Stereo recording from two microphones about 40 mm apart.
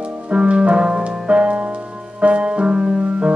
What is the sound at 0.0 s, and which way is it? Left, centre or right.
Music, right.